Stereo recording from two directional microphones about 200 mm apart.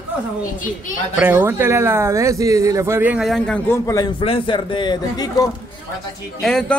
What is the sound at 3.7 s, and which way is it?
Speech, 15° left (ahead or behind).